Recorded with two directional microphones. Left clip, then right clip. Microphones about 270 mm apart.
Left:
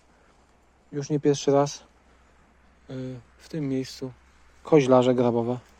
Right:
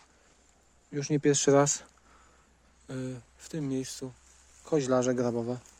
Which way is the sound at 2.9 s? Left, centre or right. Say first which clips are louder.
Left 2 dB; right.